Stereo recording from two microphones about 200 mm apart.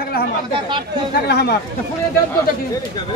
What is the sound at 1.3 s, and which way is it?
Speech, 55° left (ahead or behind).